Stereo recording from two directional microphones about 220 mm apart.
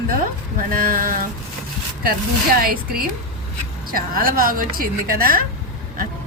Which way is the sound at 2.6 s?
40° right (ahead or behind).